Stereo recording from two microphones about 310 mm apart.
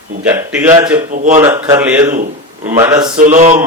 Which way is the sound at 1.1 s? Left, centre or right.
Right.